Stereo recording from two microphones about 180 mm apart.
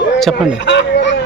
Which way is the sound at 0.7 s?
80° left.